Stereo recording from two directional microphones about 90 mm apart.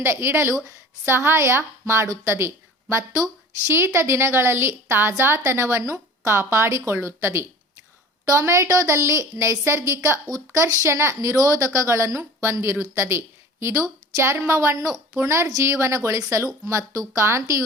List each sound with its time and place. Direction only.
0.0 s a woman's voice: 25° right (ahead or behind)
3.7 s a woman's voice: 30° right (ahead or behind)